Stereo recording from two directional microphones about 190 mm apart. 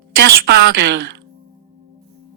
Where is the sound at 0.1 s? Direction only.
60° right (ahead or behind).